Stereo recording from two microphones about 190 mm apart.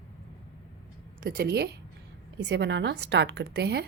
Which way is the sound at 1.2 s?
55° right (ahead or behind).